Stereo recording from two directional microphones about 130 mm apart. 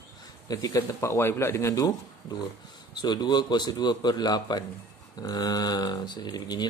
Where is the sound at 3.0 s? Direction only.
35° left (ahead or behind).